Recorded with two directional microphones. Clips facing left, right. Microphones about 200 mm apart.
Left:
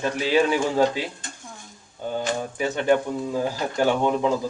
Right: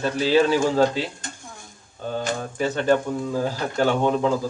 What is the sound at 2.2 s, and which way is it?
Speech, 15° left (ahead or behind).